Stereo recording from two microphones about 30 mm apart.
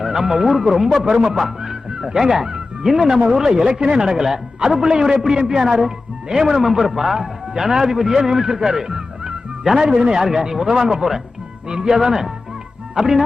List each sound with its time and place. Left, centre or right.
0.0 s a man's voice: centre
3.5 s a man's voice: right